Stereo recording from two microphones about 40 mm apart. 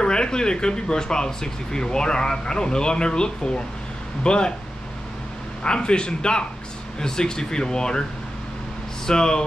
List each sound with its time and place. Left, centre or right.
0.0 s speech: left
5.6 s speech: left
9.0 s speech: centre